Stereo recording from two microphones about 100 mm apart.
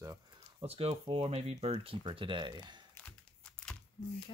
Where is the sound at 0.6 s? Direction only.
85° right.